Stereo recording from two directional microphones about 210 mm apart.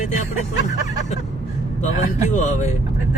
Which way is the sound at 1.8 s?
35° left (ahead or behind).